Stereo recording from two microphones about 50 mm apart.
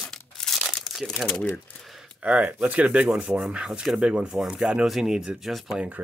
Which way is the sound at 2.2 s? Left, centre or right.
Right.